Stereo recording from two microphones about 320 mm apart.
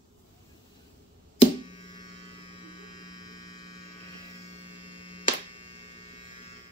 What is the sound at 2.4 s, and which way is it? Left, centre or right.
Hum, centre.